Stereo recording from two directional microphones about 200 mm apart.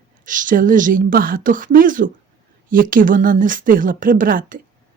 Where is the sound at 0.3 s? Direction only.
40° right (ahead or behind).